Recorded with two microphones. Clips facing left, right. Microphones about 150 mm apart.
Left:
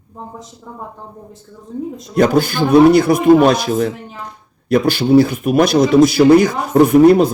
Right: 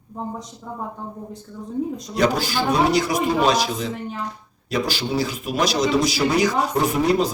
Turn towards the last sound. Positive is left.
turn(degrees=60)  # may be behind; listen again after turning